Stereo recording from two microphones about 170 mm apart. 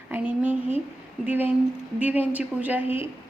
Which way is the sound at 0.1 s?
10° right (ahead or behind).